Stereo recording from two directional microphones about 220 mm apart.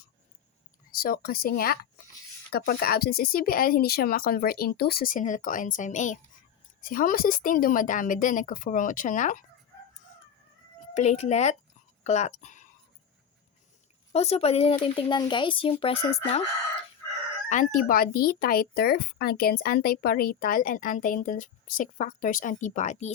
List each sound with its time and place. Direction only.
0.9 s speech: 40° left (ahead or behind)
10.9 s speech: 30° left (ahead or behind)
14.1 s speech: 30° left (ahead or behind)
17.5 s speech: 35° left (ahead or behind)